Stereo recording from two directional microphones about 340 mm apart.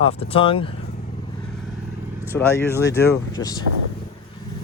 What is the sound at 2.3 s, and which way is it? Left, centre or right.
Speech, centre.